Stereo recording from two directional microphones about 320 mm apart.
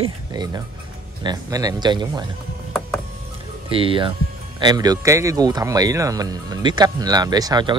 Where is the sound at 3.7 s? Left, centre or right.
Centre.